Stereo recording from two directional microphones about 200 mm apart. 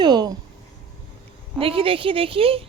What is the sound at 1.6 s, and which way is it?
Speech, 30° right (ahead or behind).